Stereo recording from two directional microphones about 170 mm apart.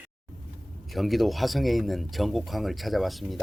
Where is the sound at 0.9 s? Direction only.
Centre (ahead or behind).